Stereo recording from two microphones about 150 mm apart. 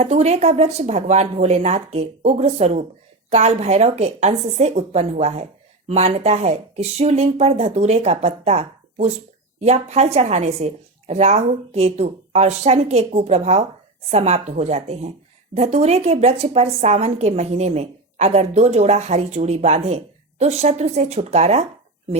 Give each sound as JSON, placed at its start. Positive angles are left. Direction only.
{"t": 0.0, "sound": "a woman's voice", "side_deg": -45}